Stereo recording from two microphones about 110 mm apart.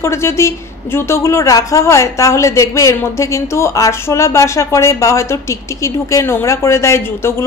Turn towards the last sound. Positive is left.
turn(degrees=25)  # may be behind; listen again after turning